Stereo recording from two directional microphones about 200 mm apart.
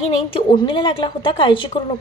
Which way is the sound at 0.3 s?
25° left (ahead or behind).